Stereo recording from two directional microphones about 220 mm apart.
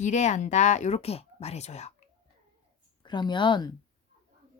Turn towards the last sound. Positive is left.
turn(degrees=20)  # may be behind; listen again after turning